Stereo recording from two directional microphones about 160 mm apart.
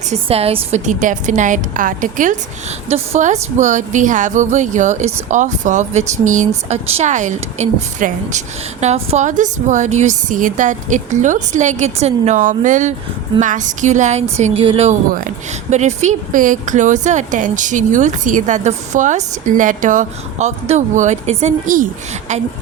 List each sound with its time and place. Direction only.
0.1 s speech: 40° right (ahead or behind); by 2.4 s 55° right (ahead or behind)
2.9 s speech: 45° right (ahead or behind)